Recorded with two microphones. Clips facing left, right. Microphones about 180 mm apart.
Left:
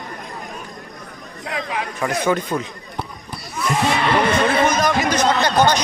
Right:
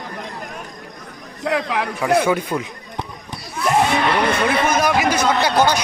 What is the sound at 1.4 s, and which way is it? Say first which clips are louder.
Speech: right 5 dB; 70° right (ahead or behind).